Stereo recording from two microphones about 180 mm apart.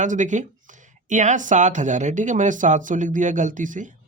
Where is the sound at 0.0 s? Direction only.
45° right (ahead or behind).